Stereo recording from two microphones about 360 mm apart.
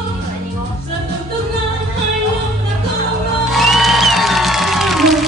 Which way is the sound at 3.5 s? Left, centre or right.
Centre.